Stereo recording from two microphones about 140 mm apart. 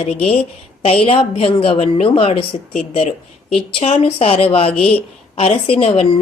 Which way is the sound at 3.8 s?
50° left (ahead or behind).